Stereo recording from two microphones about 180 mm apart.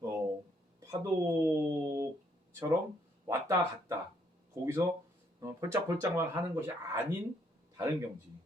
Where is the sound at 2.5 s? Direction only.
15° right (ahead or behind).